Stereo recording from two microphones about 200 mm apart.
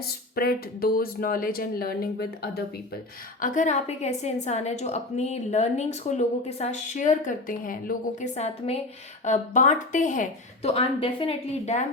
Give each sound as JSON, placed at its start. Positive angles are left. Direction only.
{"t": 0.0, "sound": "speech", "side_deg": 50}
{"t": 3.4, "sound": "a woman's voice", "side_deg": 40}